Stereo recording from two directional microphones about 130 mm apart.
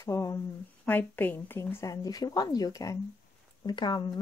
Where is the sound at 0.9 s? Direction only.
15° left (ahead or behind).